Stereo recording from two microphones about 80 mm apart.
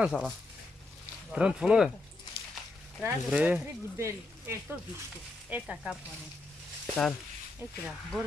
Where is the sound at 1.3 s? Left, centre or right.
Centre.